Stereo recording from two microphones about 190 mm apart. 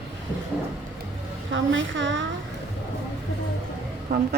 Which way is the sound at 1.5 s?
75° right (ahead or behind).